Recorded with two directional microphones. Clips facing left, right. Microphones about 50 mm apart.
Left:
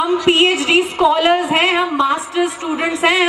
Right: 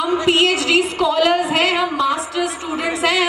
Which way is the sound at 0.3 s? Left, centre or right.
Left.